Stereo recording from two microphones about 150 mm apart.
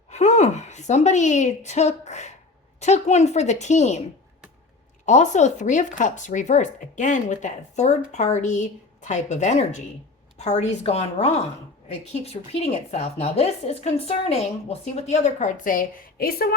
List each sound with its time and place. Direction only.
0.1 s a woman's voice: 50° left (ahead or behind)
5.0 s speech: 50° left (ahead or behind); by 16.6 s 90° left